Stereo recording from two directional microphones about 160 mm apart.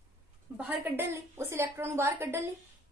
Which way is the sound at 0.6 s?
10° right (ahead or behind).